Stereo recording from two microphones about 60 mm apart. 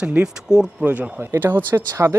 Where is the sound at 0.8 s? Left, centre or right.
Right.